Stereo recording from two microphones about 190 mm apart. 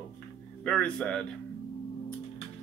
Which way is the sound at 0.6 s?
5° left (ahead or behind).